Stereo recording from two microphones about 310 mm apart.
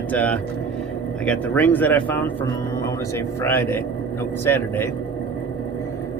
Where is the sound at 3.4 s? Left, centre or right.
Centre.